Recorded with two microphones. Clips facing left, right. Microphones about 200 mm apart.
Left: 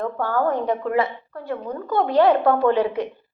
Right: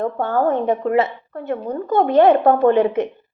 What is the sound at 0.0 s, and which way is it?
A woman's voice, 25° right (ahead or behind).